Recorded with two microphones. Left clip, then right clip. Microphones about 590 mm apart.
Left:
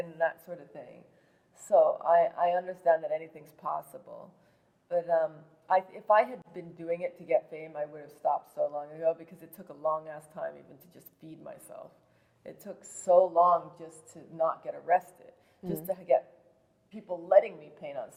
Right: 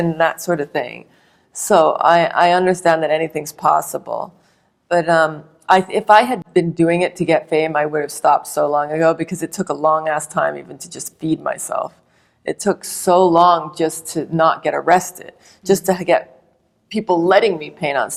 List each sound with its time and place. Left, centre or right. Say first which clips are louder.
0.2 s speech: right 13 dB; right